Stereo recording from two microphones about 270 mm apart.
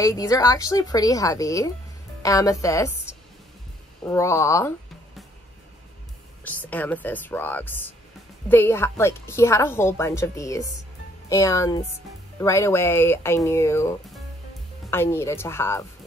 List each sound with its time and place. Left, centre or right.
0.0 s a woman's voice: centre
4.1 s a woman's voice: centre
6.4 s a woman's voice: centre